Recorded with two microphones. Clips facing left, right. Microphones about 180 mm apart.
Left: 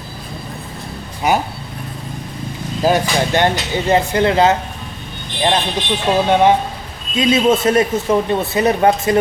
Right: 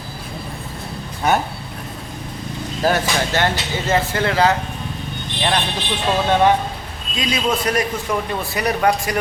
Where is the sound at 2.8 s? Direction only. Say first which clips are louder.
Left 3 dB; 15° left (ahead or behind).